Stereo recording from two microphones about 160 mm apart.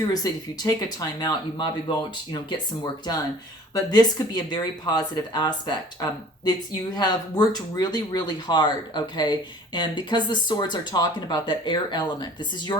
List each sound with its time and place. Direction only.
0.1 s speech: 25° left (ahead or behind)
3.8 s speech: 25° left (ahead or behind)